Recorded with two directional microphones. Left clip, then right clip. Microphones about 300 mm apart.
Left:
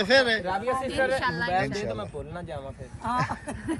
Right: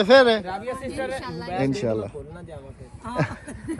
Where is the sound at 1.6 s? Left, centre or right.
Centre.